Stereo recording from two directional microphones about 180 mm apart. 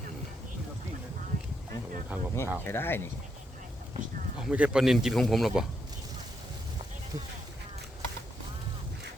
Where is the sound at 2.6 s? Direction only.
10° left (ahead or behind).